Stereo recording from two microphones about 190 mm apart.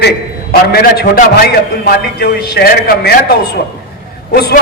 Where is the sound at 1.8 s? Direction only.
55° left (ahead or behind).